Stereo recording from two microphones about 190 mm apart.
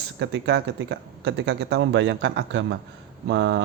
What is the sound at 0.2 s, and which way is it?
Speech, 65° right (ahead or behind).